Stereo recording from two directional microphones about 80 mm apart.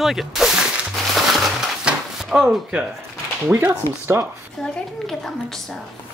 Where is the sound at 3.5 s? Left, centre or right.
Right.